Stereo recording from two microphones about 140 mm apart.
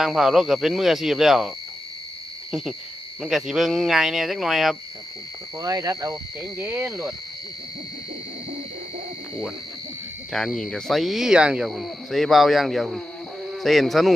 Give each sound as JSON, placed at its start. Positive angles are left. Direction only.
{"t": 0.0, "sound": "speech", "side_deg": -5}
{"t": 5.5, "sound": "speech", "side_deg": -25}
{"t": 6.4, "sound": "speech", "side_deg": -10}
{"t": 10.3, "sound": "speech", "side_deg": 0}